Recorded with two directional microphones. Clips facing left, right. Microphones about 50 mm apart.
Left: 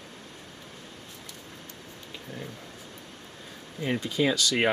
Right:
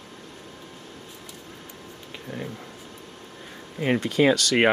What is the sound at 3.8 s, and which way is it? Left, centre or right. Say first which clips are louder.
Speech: right 6 dB; right.